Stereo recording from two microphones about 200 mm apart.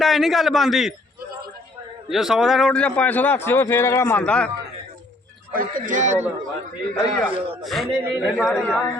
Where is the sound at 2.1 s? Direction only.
Centre (ahead or behind).